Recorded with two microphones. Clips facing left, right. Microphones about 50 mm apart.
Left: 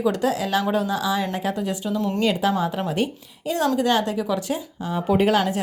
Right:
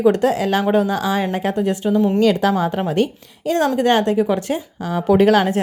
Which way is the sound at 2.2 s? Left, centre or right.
Right.